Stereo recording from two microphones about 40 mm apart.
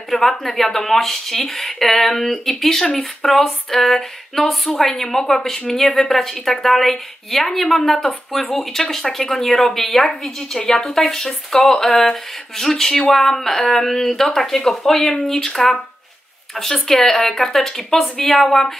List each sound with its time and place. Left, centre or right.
0.1 s speech: centre
3.3 s a sound: centre
4.7 s speech: centre
11.6 s speech: centre